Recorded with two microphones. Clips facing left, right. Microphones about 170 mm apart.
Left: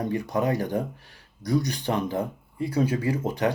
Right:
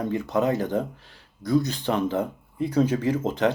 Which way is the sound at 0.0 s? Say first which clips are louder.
Right 2 dB; 15° left (ahead or behind).